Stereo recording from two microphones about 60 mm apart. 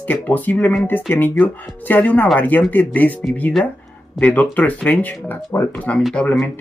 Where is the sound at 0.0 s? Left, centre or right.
Left.